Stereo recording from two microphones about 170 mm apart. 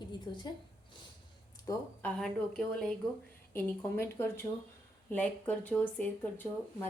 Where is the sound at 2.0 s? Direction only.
5° left (ahead or behind).